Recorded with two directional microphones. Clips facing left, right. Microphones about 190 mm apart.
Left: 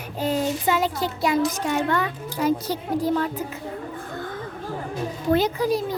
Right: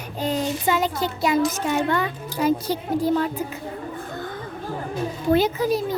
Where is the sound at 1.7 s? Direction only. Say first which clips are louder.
Right 1 dB; 25° right (ahead or behind).